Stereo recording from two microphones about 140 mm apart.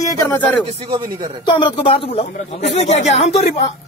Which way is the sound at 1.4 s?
35° left (ahead or behind).